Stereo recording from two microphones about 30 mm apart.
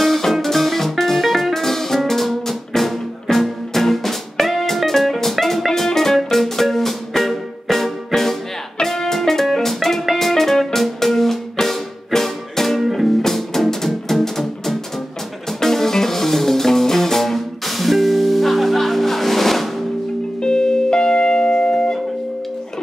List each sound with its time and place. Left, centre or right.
0.3 s music: centre
20.4 s music: left